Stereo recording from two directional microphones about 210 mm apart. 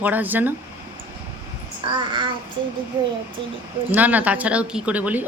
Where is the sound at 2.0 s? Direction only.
20° right (ahead or behind).